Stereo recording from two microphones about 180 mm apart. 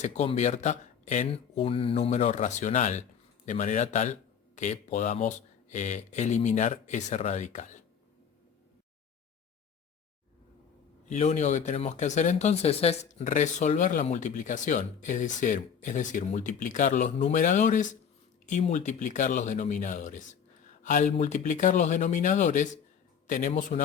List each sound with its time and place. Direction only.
0.0 s a man's voice: 40° left (ahead or behind)
1.3 s a man's voice: 30° left (ahead or behind)
11.1 s speech: 40° left (ahead or behind)